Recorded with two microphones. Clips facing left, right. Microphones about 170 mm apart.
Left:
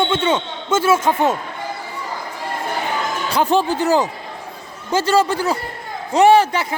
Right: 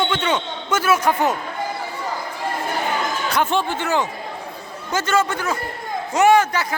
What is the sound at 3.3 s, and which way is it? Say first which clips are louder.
Speech: left 5 dB; 35° left (ahead or behind).